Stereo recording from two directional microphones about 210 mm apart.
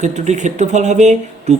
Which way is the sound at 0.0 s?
35° right (ahead or behind).